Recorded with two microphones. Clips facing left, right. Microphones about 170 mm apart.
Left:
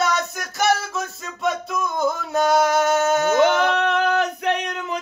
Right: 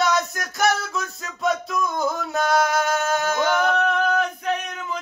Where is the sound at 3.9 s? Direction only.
75° left (ahead or behind).